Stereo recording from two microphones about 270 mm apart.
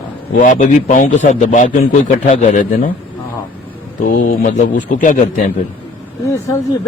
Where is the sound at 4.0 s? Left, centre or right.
Left.